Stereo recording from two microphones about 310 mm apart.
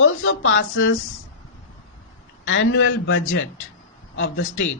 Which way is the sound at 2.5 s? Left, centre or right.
Left.